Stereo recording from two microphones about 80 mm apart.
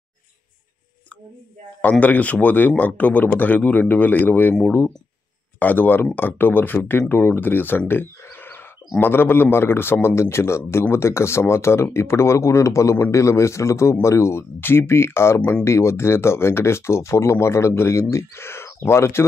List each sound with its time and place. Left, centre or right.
1.8 s a man's voice: left
5.6 s a man's voice: left
7.9 s a sound: left
9.0 s a man's voice: left